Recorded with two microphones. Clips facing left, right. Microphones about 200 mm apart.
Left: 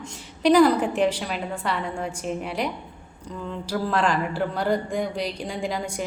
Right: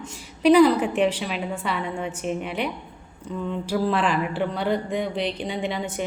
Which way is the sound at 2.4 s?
35° left (ahead or behind).